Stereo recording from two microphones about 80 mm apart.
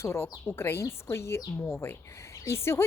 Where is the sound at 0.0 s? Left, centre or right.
Left.